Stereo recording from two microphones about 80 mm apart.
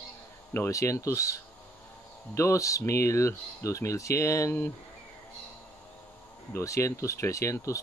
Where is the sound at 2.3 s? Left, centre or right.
Left.